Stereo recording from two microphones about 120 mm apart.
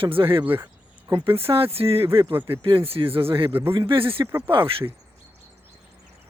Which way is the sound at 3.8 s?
50° right (ahead or behind).